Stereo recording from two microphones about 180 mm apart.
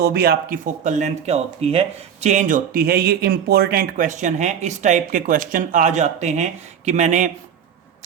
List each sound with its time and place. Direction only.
0.0 s speech: 60° right (ahead or behind); by 7.3 s 40° right (ahead or behind)